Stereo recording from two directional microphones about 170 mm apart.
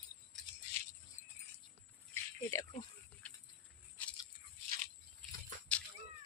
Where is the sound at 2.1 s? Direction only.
15° left (ahead or behind).